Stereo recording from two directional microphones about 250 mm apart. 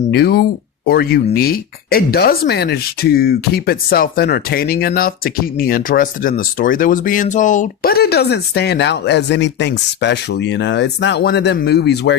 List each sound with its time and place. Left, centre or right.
0.1 s speech: left